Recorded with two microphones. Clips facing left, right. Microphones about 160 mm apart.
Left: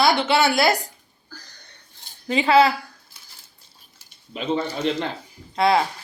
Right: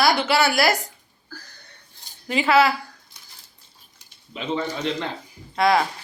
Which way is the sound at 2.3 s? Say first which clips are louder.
Left 2 dB; 30° left (ahead or behind).